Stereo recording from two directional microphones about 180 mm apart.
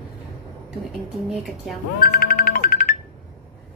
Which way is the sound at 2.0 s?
55° left (ahead or behind).